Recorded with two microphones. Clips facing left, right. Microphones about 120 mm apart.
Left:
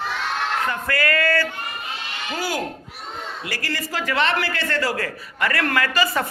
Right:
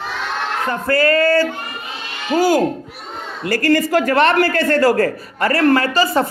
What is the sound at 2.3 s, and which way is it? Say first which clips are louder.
A man's voice: right 12 dB; 40° right (ahead or behind).